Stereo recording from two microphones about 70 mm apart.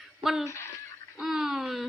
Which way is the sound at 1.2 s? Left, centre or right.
Centre.